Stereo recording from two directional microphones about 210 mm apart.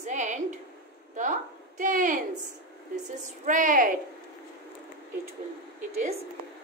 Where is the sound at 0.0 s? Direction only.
35° right (ahead or behind).